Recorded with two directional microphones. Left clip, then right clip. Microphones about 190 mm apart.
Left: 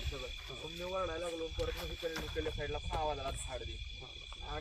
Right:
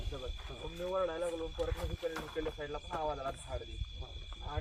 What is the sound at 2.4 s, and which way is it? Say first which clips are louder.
Speech: left 1 dB; 40° left (ahead or behind).